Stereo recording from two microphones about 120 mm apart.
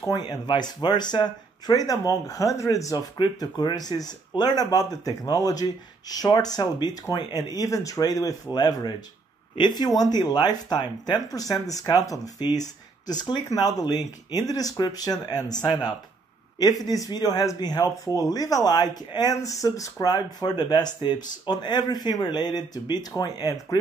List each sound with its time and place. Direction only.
0.3 s speech: 35° left (ahead or behind)